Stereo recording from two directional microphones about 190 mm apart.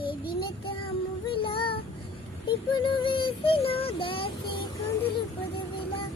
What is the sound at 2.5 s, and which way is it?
Synthetic singing, 25° left (ahead or behind).